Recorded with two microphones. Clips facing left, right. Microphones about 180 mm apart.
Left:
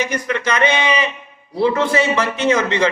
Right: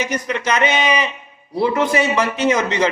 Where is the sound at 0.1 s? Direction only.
15° right (ahead or behind).